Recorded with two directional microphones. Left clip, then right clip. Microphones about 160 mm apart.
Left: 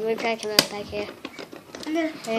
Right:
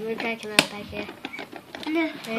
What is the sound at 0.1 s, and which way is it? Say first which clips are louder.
Speech: even; 30° left (ahead or behind).